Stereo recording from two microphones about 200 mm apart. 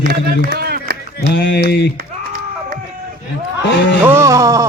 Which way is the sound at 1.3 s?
60° left (ahead or behind).